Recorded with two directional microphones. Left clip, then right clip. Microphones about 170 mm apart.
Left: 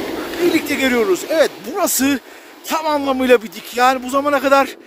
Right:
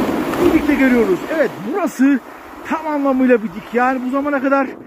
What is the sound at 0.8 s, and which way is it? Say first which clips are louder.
Speech: right 1 dB; 55° left (ahead or behind).